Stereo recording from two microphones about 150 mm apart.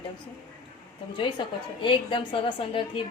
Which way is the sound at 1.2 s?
35° left (ahead or behind).